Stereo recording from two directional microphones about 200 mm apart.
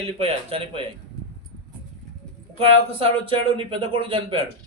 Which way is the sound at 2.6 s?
30° right (ahead or behind).